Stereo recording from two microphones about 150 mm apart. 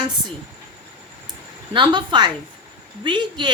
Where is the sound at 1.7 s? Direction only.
30° right (ahead or behind).